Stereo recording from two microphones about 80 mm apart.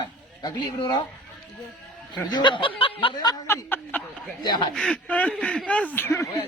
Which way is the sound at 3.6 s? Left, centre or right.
Left.